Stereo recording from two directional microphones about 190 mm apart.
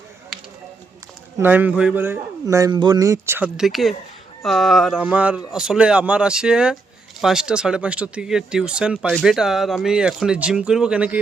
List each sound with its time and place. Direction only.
1.4 s a man's voice: 10° right (ahead or behind)